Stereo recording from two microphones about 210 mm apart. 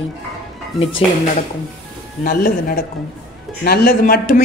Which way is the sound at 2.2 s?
45° left (ahead or behind).